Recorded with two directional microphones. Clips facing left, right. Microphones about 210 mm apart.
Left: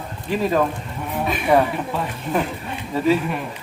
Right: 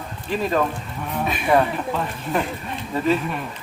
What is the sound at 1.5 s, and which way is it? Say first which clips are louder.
Speech: left 1 dB; 5° left (ahead or behind).